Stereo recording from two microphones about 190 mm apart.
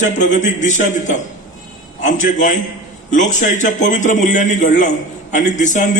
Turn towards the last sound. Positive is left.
turn(degrees=40)  # may be behind; listen again after turning